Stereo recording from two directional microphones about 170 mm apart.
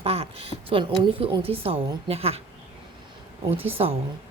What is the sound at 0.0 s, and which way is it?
A woman's voice, 35° right (ahead or behind).